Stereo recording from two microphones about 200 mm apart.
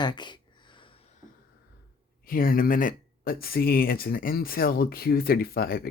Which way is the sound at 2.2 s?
45° left (ahead or behind).